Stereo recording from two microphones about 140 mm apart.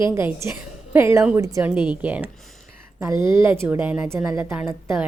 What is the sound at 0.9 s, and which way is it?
A woman's voice, 20° right (ahead or behind).